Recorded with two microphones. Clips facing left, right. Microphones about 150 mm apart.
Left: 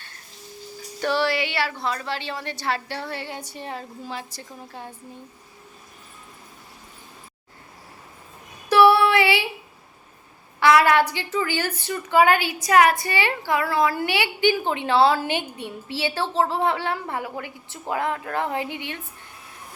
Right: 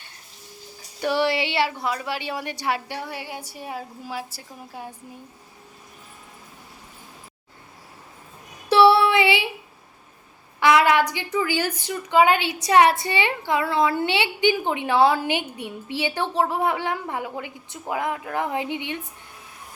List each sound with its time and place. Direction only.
1.0 s a woman's voice: 15° right (ahead or behind)
8.7 s child singing: 25° right (ahead or behind)
10.6 s a sound: 15° right (ahead or behind)
11.1 s a woman's voice: 15° right (ahead or behind)